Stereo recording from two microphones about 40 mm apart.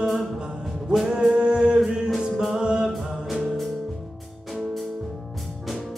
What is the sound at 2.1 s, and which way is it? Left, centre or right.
Music, centre.